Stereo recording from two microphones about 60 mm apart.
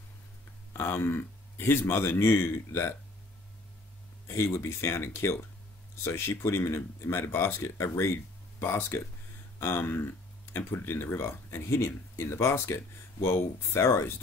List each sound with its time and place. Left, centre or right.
0.7 s a man's voice: left
4.3 s speech: left